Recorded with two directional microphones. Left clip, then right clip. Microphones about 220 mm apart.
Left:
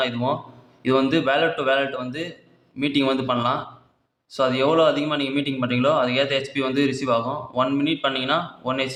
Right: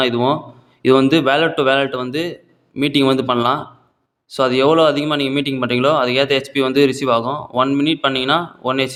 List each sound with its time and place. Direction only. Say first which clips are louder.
0.0 s a man's voice: right 7 dB; 40° right (ahead or behind)